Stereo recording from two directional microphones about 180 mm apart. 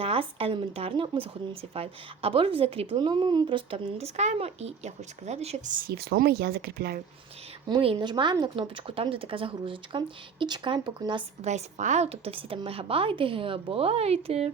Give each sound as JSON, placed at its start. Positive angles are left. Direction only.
{"t": 0.0, "sound": "speech", "side_deg": -30}
{"t": 7.7, "sound": "speech", "side_deg": -25}
{"t": 11.4, "sound": "speech", "side_deg": -40}